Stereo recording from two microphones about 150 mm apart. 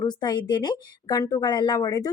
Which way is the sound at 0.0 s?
30° left (ahead or behind).